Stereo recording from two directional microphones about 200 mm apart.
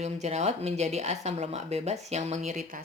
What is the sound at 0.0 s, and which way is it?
Speech, 35° right (ahead or behind).